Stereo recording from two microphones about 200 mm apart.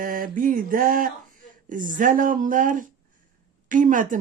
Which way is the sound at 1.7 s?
40° right (ahead or behind).